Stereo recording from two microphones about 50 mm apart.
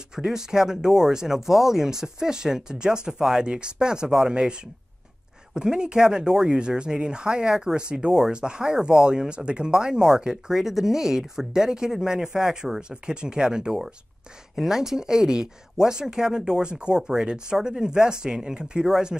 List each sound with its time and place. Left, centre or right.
0.1 s speech: centre